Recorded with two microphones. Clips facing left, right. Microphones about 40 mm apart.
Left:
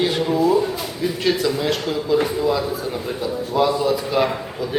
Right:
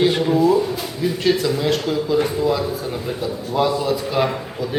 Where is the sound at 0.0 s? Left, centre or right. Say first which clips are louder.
Right 2 dB; centre.